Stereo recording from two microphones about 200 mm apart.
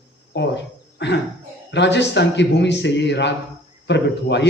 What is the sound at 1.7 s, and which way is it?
A man's voice, 60° left (ahead or behind).